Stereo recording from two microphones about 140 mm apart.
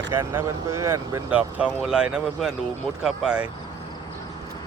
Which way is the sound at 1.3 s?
10° right (ahead or behind).